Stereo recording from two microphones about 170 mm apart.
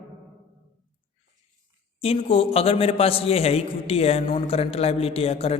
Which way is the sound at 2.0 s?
35° left (ahead or behind).